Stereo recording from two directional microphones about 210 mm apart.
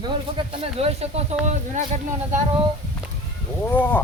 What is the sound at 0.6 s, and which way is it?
Speech, 30° right (ahead or behind).